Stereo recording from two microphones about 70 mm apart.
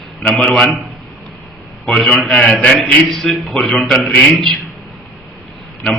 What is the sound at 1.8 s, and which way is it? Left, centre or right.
A man's voice, centre.